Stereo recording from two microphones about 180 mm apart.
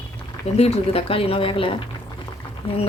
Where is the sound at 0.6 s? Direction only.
30° left (ahead or behind).